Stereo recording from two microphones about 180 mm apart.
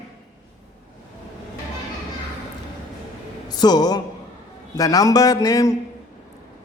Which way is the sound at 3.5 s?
25° left (ahead or behind).